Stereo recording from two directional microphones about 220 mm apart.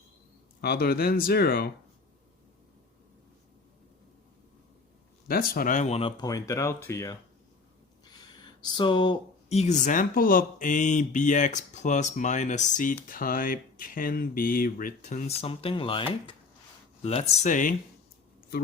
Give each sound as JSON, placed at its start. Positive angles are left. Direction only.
{"t": 0.6, "sound": "speech", "side_deg": 45}
{"t": 5.3, "sound": "speech", "side_deg": 40}